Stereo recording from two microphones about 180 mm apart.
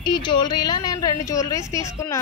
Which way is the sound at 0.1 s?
25° left (ahead or behind).